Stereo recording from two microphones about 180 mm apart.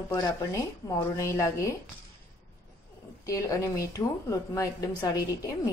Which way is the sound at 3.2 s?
15° left (ahead or behind).